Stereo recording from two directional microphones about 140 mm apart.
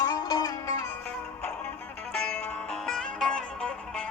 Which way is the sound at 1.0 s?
10° left (ahead or behind).